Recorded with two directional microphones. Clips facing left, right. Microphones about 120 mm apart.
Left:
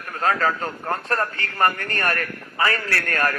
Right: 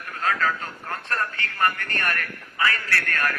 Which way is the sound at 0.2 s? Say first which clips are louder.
Left 4 dB; 40° left (ahead or behind).